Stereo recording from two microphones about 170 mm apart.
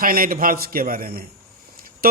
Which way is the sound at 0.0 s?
55° right (ahead or behind).